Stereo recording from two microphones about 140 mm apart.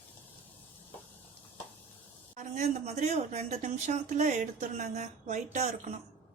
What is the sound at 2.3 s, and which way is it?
A woman's voice, 60° right (ahead or behind).